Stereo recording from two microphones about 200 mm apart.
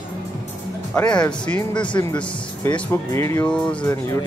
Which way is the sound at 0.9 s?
5° left (ahead or behind).